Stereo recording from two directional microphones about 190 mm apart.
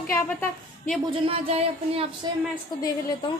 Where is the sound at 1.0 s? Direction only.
30° right (ahead or behind).